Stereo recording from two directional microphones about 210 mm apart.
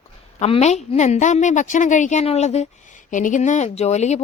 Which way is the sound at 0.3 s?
30° left (ahead or behind).